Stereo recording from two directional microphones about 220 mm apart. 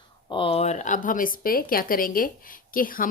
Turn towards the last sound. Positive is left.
turn(degrees=40)  # may be behind; listen again after turning